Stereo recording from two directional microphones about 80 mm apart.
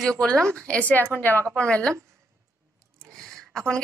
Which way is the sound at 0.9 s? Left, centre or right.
Left.